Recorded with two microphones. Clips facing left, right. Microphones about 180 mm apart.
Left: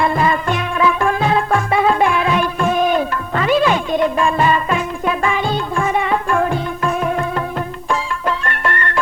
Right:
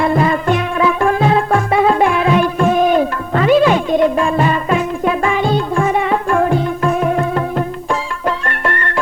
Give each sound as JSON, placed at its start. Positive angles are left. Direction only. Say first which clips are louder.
{"t": 0.0, "sound": "music", "louder": "right 2 dB", "side_deg": -40}